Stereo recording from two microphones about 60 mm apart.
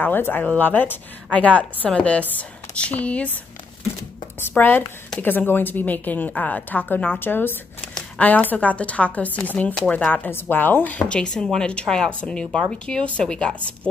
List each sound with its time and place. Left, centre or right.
0.0 s a woman's voice: left
4.4 s a woman's voice: left; by 13.7 s centre